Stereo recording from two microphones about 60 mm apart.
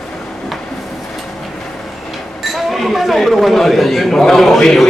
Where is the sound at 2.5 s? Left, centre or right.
Centre.